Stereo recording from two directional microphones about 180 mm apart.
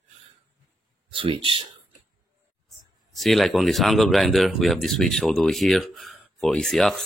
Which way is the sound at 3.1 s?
Centre (ahead or behind).